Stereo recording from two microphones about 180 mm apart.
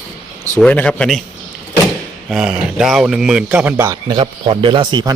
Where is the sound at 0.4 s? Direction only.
10° left (ahead or behind).